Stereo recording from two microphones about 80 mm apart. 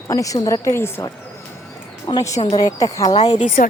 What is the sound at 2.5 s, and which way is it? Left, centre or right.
Speech, left.